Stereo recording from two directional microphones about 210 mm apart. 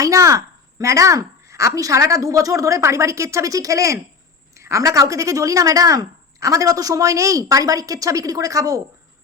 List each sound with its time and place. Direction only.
0.0 s speech: 15° right (ahead or behind)